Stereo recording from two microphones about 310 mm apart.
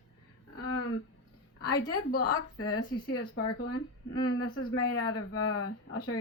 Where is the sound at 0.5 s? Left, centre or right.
Left.